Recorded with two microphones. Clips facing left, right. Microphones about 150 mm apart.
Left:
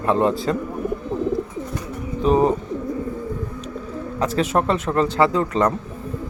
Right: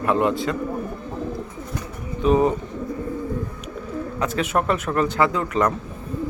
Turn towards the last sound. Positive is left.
turn(degrees=30)  # may be behind; listen again after turning